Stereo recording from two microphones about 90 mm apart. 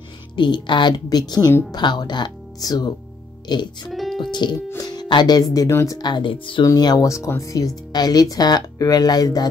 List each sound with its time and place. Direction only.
0.4 s speech: 60° left (ahead or behind)
1.0 s speech: 50° left (ahead or behind)
3.9 s music: centre (ahead or behind)
4.3 s speech: 55° left (ahead or behind); by 6.6 s 70° left (ahead or behind)
6.6 s speech: 45° left (ahead or behind)
7.1 s speech: 35° left (ahead or behind)